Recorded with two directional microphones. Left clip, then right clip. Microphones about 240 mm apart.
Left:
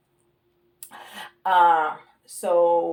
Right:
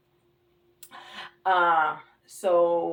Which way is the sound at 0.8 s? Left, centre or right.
Left.